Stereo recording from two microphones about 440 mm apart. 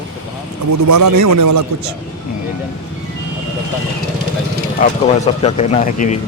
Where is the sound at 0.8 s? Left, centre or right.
Right.